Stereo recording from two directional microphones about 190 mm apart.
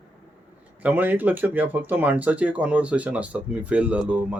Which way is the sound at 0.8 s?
10° right (ahead or behind).